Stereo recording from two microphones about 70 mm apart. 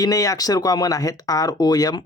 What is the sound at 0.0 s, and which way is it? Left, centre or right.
Speech, left.